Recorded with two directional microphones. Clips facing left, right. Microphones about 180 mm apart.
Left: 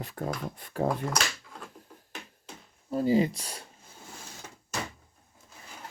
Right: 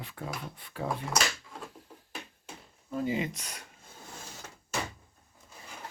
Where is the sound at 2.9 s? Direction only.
35° left (ahead or behind).